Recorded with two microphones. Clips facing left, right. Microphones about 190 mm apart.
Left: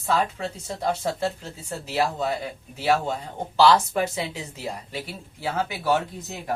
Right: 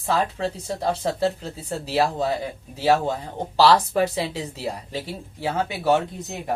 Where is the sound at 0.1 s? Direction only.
30° right (ahead or behind).